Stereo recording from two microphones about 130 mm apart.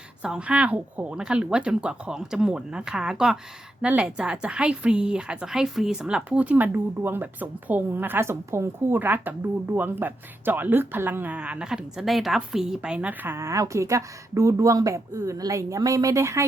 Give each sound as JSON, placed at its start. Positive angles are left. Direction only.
{"t": 0.2, "sound": "speech", "side_deg": -5}